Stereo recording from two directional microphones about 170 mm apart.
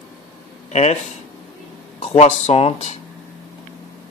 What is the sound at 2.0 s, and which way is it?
Speech, 40° left (ahead or behind).